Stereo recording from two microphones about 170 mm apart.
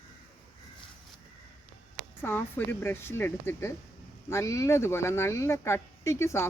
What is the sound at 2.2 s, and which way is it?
Speech, 15° left (ahead or behind).